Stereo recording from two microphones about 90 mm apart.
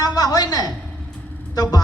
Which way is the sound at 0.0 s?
45° left (ahead or behind).